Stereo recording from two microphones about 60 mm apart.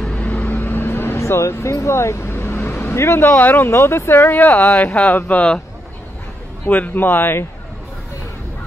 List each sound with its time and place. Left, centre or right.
0.0 s vehicle: centre; by 1.2 s left
1.2 s speech: left
3.3 s speech: left
6.7 s speech: left